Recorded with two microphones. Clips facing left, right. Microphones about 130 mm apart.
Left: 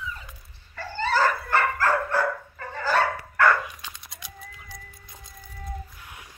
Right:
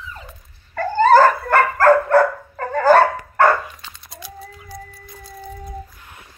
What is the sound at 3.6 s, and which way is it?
Dog, 10° left (ahead or behind).